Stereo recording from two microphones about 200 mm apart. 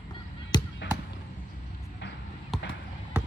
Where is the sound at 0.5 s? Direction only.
20° left (ahead or behind).